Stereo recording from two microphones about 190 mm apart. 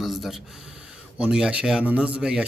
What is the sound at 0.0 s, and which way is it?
Speech, centre (ahead or behind).